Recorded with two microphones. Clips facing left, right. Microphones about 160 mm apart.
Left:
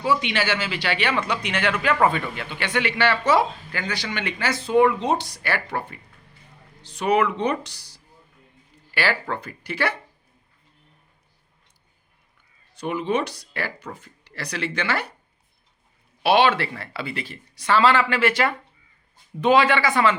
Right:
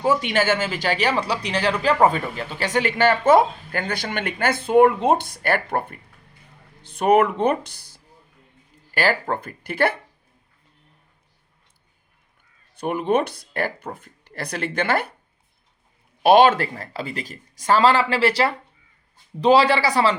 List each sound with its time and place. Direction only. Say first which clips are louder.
0.0 s speech: right 3 dB; 45° right (ahead or behind)
12.7 s speech: right 3 dB; 55° right (ahead or behind)
16.2 s speech: right 4 dB; 45° right (ahead or behind)